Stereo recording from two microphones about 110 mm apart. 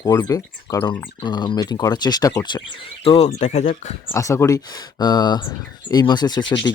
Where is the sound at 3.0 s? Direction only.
65° left (ahead or behind); by 3.6 s 90° left.